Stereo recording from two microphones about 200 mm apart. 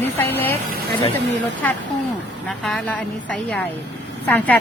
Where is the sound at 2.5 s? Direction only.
Centre (ahead or behind).